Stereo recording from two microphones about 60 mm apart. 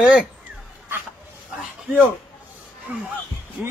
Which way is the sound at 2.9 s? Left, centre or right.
Right.